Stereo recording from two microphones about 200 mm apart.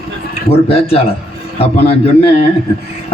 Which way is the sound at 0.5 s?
30° left (ahead or behind).